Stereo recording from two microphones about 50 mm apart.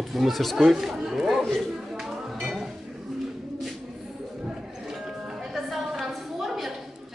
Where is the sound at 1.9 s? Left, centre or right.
Centre.